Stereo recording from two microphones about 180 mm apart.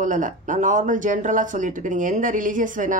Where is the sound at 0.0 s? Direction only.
45° right (ahead or behind).